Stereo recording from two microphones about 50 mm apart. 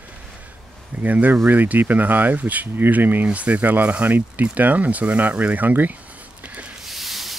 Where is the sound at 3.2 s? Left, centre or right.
Right.